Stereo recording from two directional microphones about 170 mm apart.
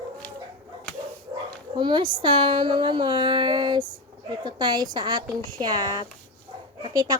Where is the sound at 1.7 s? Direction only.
25° right (ahead or behind).